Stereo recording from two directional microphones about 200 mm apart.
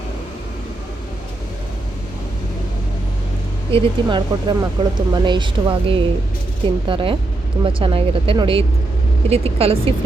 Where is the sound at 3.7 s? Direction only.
20° right (ahead or behind).